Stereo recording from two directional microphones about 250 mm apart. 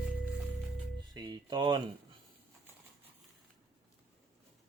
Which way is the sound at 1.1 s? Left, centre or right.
Centre.